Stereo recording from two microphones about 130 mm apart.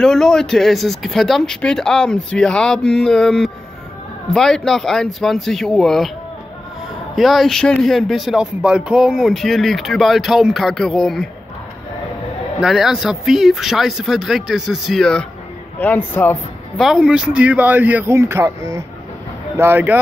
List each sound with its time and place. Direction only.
0.0 s speech: 5° left (ahead or behind)
7.2 s speech: centre (ahead or behind)
12.6 s a man's voice: 5° right (ahead or behind); by 16.3 s 15° left (ahead or behind)
16.7 s speech: centre (ahead or behind)